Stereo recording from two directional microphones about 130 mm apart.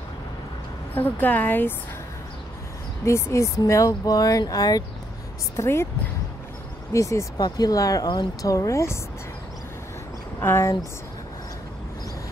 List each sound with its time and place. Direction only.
0.9 s speech: 15° left (ahead or behind)
3.1 s speech: 20° left (ahead or behind)
6.9 s speech: 25° left (ahead or behind)
10.4 s speech: 20° left (ahead or behind)